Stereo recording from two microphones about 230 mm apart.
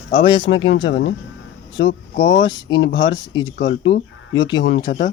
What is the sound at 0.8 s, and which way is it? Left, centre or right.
Speech, left.